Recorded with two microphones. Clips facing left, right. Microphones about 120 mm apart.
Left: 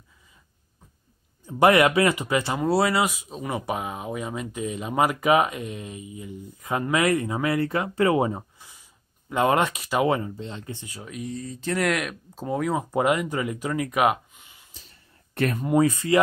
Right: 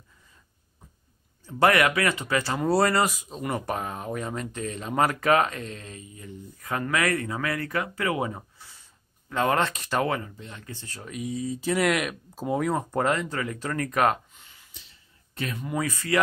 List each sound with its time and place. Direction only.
1.4 s speech: 20° left (ahead or behind)
2.6 s speech: 5° left (ahead or behind)
10.0 s speech: 25° left (ahead or behind)
10.9 s speech: 5° left (ahead or behind)
14.7 s whispering: 40° left (ahead or behind)
15.3 s speech: 55° left (ahead or behind)
15.6 s speech: 25° left (ahead or behind)